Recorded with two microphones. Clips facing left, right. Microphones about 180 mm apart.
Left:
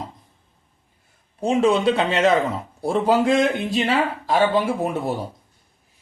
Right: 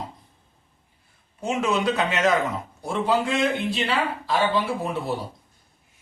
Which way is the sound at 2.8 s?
40° left (ahead or behind).